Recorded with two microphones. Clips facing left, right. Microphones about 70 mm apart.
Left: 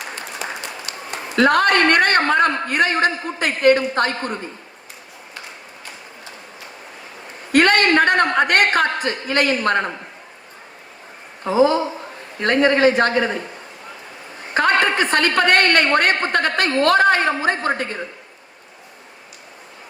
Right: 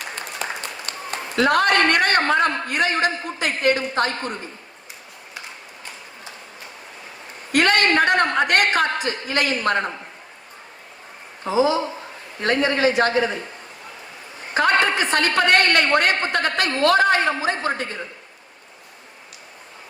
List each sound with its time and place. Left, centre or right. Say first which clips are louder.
0.9 s a sound: even; right
1.4 s a woman's voice: left 2 dB; left
7.5 s a woman's voice: left 3 dB; left
11.4 s a woman's voice: left 3 dB; left
14.5 s a woman's voice: left 1 dB; left